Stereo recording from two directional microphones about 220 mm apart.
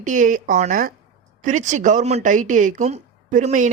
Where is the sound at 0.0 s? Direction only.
35° right (ahead or behind).